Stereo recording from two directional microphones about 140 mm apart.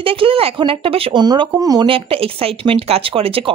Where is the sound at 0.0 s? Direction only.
40° right (ahead or behind).